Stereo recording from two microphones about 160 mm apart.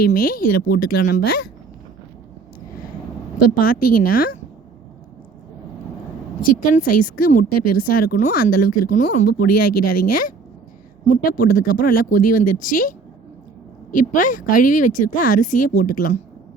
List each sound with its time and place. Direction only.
0.0 s speech: 65° left (ahead or behind)
3.3 s speech: 65° left (ahead or behind)
6.5 s speech: 60° left (ahead or behind)
13.9 s speech: 55° left (ahead or behind)